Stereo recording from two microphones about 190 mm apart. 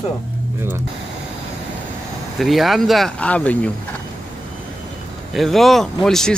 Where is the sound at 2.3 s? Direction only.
Centre (ahead or behind).